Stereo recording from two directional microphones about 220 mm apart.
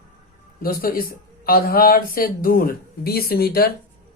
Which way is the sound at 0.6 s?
40° left (ahead or behind).